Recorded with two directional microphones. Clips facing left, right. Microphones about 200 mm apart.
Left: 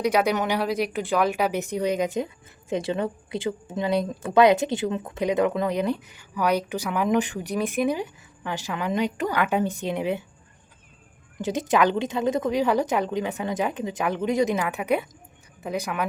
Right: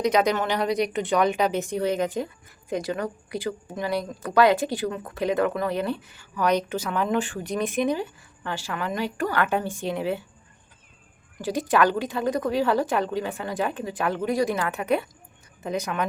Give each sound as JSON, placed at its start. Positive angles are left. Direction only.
{"t": 0.0, "sound": "a woman's voice", "side_deg": 10}
{"t": 11.3, "sound": "a woman's voice", "side_deg": 20}